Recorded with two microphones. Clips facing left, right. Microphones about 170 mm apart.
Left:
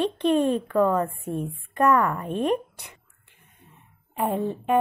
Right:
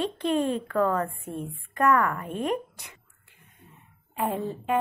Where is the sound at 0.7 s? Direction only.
15° left (ahead or behind).